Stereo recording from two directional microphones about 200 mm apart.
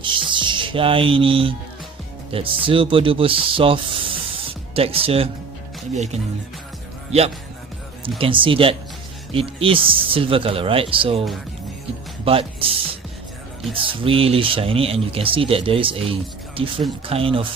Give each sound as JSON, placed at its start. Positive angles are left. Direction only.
{"t": 0.0, "sound": "speech", "side_deg": -25}
{"t": 8.2, "sound": "speech", "side_deg": -25}
{"t": 13.8, "sound": "speech", "side_deg": -25}